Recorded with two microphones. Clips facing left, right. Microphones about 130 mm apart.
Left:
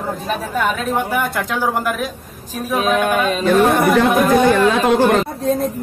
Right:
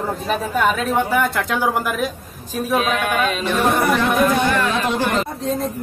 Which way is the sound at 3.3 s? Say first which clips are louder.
Left 5 dB; 45° left (ahead or behind).